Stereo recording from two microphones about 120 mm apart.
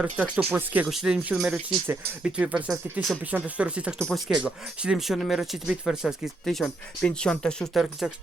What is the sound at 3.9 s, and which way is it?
Speech, 10° left (ahead or behind).